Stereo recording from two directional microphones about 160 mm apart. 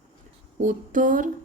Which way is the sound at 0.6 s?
55° right (ahead or behind).